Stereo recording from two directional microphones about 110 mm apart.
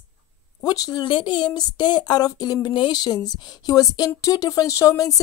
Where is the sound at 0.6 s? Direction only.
35° left (ahead or behind).